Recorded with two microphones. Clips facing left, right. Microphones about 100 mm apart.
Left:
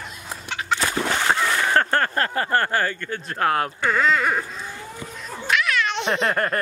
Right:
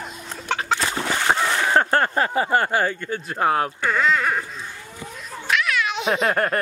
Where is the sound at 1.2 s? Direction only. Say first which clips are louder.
Right 2 dB; 15° right (ahead or behind).